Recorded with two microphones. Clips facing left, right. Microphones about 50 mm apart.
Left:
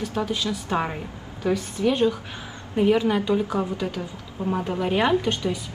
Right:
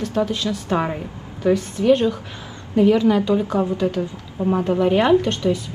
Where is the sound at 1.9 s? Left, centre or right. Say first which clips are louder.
Right 6 dB; centre.